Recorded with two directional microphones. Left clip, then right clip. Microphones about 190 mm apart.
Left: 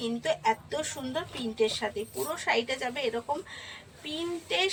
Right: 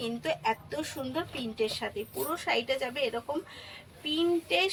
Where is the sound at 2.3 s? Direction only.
25° right (ahead or behind).